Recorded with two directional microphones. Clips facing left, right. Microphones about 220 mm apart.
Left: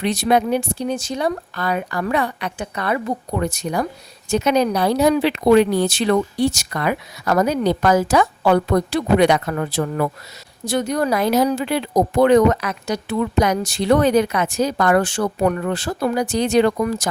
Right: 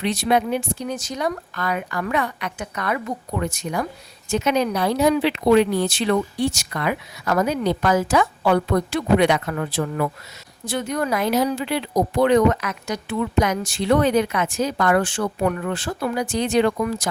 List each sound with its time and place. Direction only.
0.0 s speech: 45° left (ahead or behind)